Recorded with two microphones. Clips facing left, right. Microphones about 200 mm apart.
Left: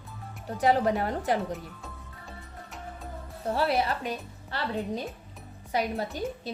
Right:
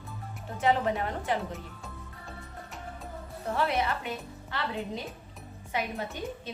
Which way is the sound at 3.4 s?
35° left (ahead or behind).